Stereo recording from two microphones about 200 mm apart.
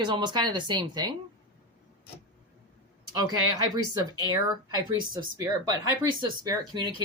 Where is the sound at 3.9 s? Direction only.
20° right (ahead or behind).